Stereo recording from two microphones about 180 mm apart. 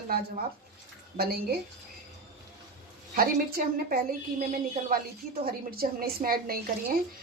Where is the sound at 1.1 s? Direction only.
60° right (ahead or behind).